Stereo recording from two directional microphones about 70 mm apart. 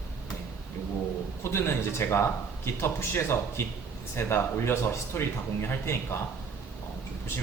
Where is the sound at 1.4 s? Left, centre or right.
Left.